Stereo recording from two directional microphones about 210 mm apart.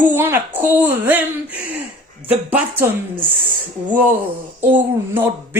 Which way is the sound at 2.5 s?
10° right (ahead or behind).